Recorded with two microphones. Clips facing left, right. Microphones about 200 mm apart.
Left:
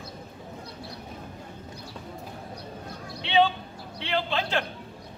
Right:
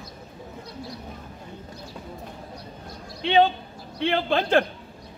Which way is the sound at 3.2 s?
45° right (ahead or behind).